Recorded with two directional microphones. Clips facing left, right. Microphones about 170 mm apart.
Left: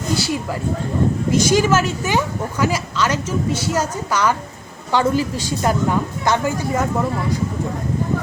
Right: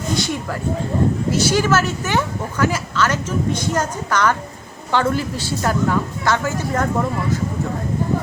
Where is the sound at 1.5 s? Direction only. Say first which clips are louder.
Left 1 dB; 15° left (ahead or behind).